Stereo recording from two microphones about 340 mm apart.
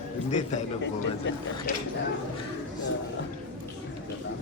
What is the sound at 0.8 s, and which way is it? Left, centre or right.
Speech, left.